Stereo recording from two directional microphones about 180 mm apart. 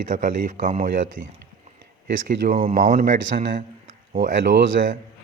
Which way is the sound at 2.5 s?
40° right (ahead or behind).